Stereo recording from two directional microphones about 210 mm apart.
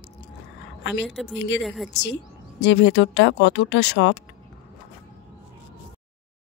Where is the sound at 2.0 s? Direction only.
55° left (ahead or behind).